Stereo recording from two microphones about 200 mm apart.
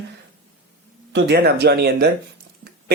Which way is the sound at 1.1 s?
55° right (ahead or behind).